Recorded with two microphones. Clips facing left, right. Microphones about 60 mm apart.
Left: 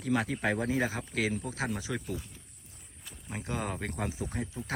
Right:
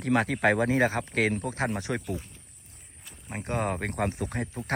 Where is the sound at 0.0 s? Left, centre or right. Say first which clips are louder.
Right 6 dB; right.